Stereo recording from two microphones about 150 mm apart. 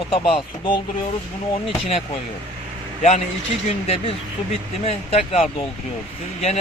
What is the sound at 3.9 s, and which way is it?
Speech, 45° left (ahead or behind).